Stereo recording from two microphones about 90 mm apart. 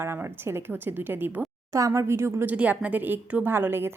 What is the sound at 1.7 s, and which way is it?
Speech, 35° right (ahead or behind).